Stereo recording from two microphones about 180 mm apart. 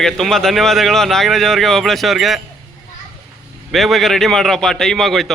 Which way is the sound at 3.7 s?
Centre (ahead or behind).